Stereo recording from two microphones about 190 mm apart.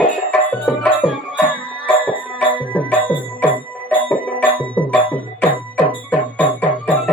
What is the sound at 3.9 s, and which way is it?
Music, 10° left (ahead or behind).